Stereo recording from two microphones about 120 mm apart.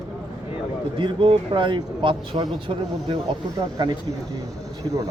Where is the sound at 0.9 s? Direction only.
45° right (ahead or behind).